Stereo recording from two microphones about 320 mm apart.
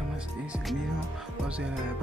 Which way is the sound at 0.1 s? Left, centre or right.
Centre.